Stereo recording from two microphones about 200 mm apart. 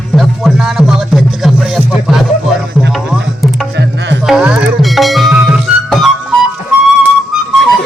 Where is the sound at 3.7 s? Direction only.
60° right (ahead or behind).